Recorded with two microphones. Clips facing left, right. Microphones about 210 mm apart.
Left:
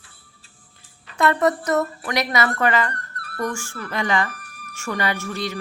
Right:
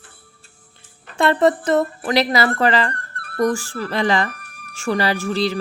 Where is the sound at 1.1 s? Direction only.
30° right (ahead or behind).